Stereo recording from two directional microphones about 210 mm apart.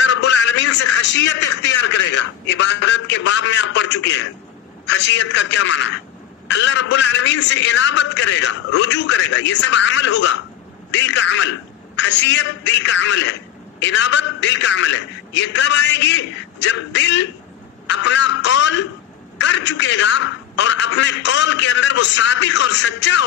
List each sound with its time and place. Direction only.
0.0 s a man's voice: 55° left (ahead or behind)